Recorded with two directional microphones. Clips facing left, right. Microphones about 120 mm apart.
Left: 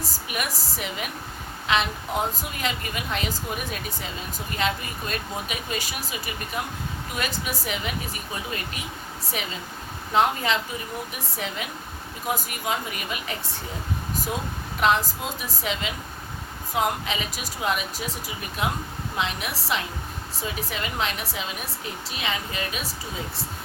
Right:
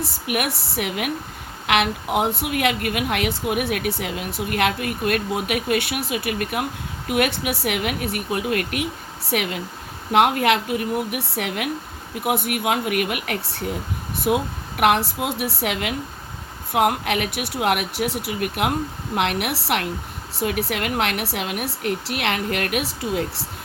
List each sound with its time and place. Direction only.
0.0 s a woman's voice: 65° right (ahead or behind)
14.8 s a woman's voice: 65° right (ahead or behind)